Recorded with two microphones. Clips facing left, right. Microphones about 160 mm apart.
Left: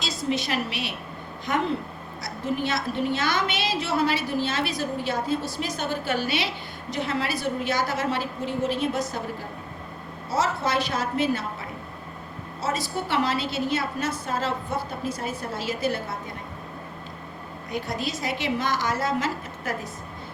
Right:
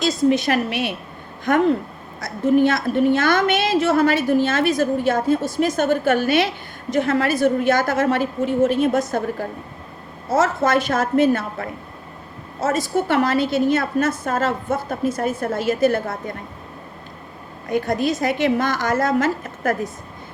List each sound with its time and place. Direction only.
0.0 s a woman's voice: 50° right (ahead or behind)
17.7 s a woman's voice: 50° right (ahead or behind)